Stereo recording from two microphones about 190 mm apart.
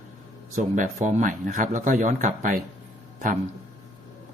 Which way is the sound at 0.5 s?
40° right (ahead or behind).